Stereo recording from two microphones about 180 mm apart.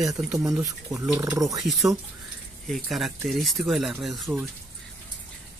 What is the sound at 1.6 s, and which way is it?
Speech, centre (ahead or behind).